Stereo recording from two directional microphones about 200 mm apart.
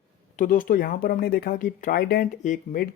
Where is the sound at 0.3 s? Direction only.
45° left (ahead or behind).